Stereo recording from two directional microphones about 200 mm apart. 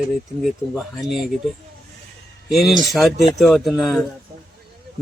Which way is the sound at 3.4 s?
Centre (ahead or behind).